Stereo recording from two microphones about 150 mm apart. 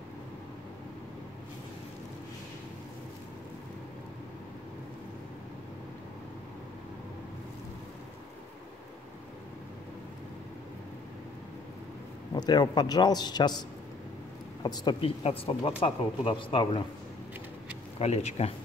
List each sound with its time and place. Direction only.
12.4 s a man's voice: 25° left (ahead or behind)
17.9 s speech: 45° left (ahead or behind)